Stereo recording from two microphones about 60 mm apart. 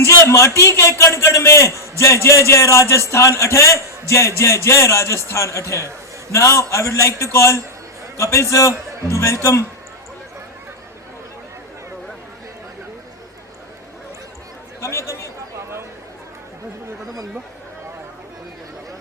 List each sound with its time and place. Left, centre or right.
0.0 s a man's voice: left
14.8 s speech: left